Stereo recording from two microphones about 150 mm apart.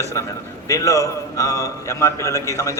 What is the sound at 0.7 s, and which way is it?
A man's voice, 20° left (ahead or behind).